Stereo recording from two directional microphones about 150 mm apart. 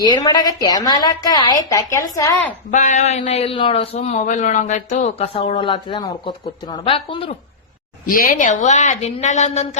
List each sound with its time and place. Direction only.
0.0 s a woman's voice: 25° left (ahead or behind)
2.6 s speech: 55° left (ahead or behind)
5.1 s speech: 45° left (ahead or behind)
8.1 s a woman's voice: 70° left (ahead or behind); by 9.6 s 50° left (ahead or behind)